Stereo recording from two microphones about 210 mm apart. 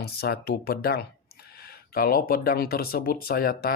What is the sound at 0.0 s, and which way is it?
Speech, 50° left (ahead or behind).